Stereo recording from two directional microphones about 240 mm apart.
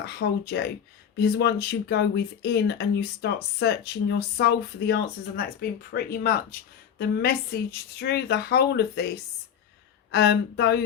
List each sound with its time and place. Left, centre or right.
0.0 s a woman's voice: left
10.1 s a woman's voice: left